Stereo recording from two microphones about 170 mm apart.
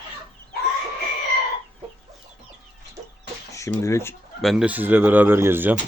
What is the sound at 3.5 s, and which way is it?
Speech, 15° left (ahead or behind).